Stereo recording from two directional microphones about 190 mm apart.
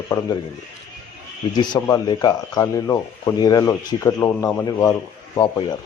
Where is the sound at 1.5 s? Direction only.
20° left (ahead or behind).